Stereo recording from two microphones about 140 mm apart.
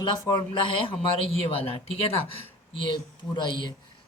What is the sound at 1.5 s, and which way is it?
Speech, 45° left (ahead or behind).